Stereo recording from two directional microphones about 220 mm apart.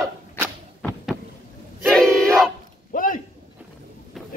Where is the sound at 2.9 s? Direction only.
40° left (ahead or behind).